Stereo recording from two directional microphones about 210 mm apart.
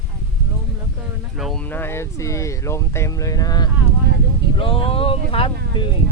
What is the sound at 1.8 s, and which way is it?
Speech, 10° left (ahead or behind).